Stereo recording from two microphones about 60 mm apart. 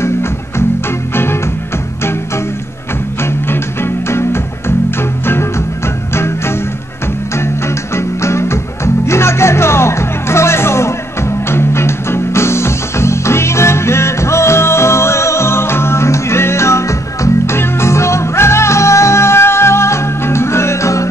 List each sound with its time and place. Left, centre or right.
0.0 s music: left
3.2 s music: left